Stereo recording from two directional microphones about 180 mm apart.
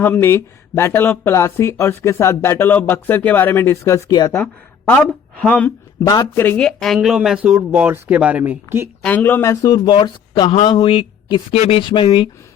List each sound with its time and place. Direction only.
0.0 s speech: 10° left (ahead or behind)
4.9 s speech: 10° left (ahead or behind); by 8.9 s 10° right (ahead or behind)
9.0 s a man's voice: 10° left (ahead or behind); by 12.3 s 25° left (ahead or behind)